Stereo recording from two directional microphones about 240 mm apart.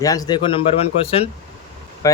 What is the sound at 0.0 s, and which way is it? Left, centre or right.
Speech, centre.